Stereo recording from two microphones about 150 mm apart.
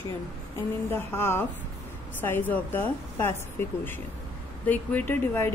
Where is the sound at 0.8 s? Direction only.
15° left (ahead or behind).